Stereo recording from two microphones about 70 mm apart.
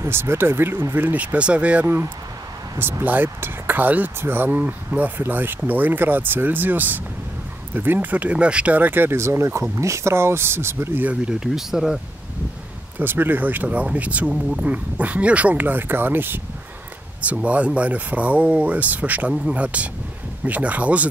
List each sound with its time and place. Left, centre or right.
0.0 s speech: right; by 1.9 s centre
2.8 s speech: right
11.1 s speech: centre
13.0 s speech: right
14.3 s speech: centre
14.7 s speech: right
17.2 s speech: centre